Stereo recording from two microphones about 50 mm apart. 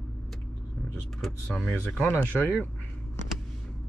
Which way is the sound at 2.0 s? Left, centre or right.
Left.